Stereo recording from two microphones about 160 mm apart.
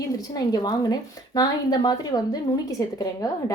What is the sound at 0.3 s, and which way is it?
Speech, 25° left (ahead or behind).